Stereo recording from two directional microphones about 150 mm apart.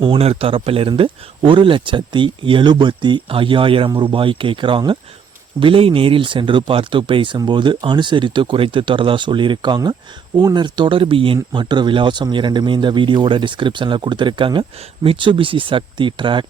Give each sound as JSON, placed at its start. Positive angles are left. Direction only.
{"t": 0.0, "sound": "speech", "side_deg": -40}